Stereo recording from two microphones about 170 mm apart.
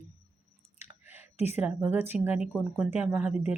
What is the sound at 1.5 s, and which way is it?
Speech, 10° right (ahead or behind).